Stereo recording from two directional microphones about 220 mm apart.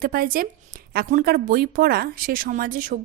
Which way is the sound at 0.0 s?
40° right (ahead or behind).